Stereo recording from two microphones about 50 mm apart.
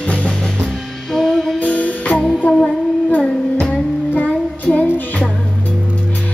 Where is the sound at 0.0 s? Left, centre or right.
Left.